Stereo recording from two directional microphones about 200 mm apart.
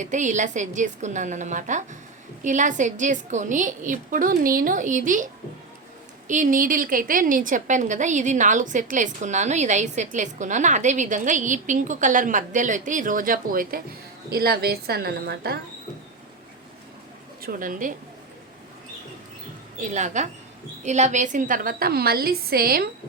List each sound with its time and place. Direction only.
0.0 s a woman's voice: 40° right (ahead or behind)
17.4 s a woman's voice: 45° right (ahead or behind)
19.8 s a woman's voice: 35° right (ahead or behind)